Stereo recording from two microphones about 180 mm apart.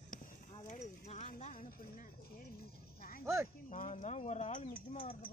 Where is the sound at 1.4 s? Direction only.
45° left (ahead or behind).